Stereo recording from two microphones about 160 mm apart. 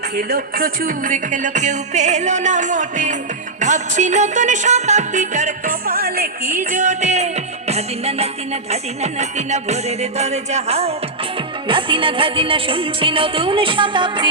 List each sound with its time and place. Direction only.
0.2 s music: 70° right (ahead or behind); by 14.3 s 30° right (ahead or behind)